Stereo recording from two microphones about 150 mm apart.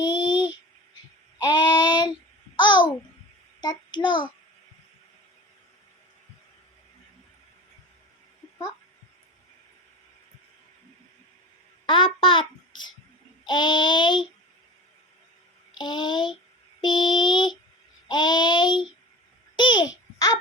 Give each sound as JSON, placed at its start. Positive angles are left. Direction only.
{"t": 0.0, "sound": "a sound", "side_deg": 30}
{"t": 1.4, "sound": "child singing", "side_deg": 25}
{"t": 2.6, "sound": "babbling", "side_deg": 30}
{"t": 3.6, "sound": "a child's voice", "side_deg": 30}
{"t": 11.9, "sound": "a sound", "side_deg": 35}
{"t": 13.4, "sound": "child singing", "side_deg": 30}
{"t": 15.8, "sound": "mantra", "side_deg": 30}
{"t": 19.5, "sound": "a child's voice", "side_deg": 30}